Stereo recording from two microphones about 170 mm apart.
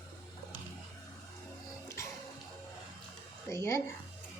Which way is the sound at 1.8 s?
15° left (ahead or behind).